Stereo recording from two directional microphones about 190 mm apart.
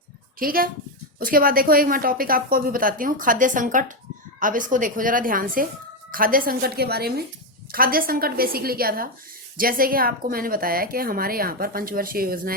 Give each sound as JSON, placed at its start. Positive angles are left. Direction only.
{"t": 0.3, "sound": "a woman's voice", "side_deg": -50}